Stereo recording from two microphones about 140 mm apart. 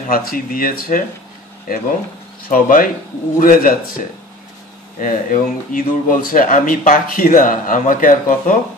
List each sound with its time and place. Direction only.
0.1 s speech: 90° left
2.5 s speech: 80° left
5.0 s speech: 70° left (ahead or behind)